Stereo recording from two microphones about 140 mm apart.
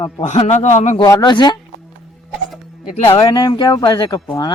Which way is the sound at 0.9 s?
30° left (ahead or behind).